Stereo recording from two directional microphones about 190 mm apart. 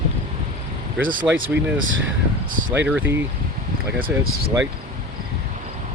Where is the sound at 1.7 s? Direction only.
90° right.